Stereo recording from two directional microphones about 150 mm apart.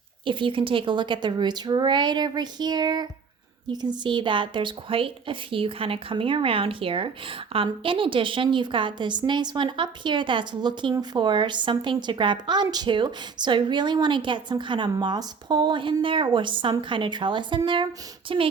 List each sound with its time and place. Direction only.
0.3 s a woman's voice: 35° right (ahead or behind)